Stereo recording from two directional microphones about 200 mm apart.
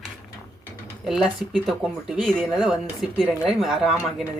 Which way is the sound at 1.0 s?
Centre (ahead or behind).